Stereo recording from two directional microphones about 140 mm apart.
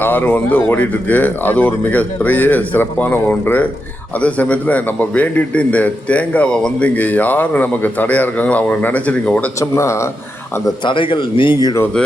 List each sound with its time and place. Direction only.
0.0 s a man's voice: 15° left (ahead or behind)
9.6 s speech: 20° left (ahead or behind)
10.8 s speech: 35° left (ahead or behind)